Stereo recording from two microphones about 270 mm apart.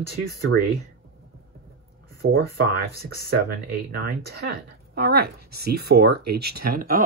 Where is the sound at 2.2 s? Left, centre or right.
Right.